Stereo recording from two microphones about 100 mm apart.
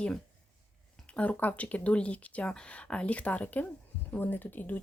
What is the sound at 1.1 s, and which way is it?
Speech, 15° left (ahead or behind).